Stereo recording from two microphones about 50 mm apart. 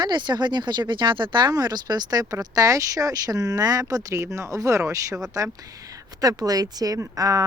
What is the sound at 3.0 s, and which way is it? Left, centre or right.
Speech, right.